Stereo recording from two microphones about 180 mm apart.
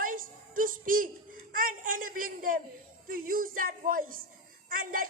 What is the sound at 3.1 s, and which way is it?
A woman's voice, 50° right (ahead or behind).